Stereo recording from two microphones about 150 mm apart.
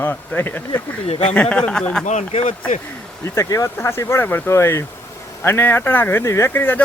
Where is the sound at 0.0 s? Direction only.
15° left (ahead or behind).